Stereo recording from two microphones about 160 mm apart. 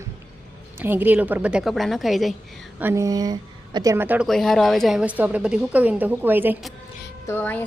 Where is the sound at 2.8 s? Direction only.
15° right (ahead or behind).